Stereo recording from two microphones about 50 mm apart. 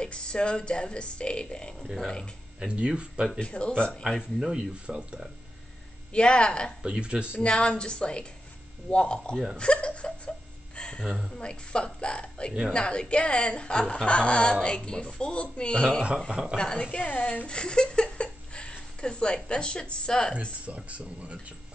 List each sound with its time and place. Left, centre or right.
0.0 s speech: centre
3.3 s speech: left
4.0 s speech: centre
4.8 s speech: centre
6.1 s speech: centre
6.8 s speech: right
7.4 s speech: left
9.6 s a sound: left
11.3 s speech: centre
16.3 s speech: centre
16.5 s speech: centre
16.9 s speech: left
17.5 s speech: centre
20.6 s speech: right